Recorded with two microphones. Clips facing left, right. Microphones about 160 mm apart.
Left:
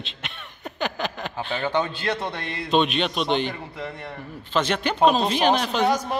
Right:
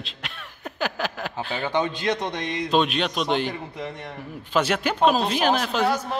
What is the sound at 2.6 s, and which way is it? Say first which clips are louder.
Speech: left 1 dB; centre (ahead or behind).